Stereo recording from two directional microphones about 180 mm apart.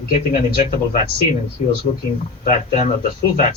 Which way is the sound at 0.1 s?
45° left (ahead or behind).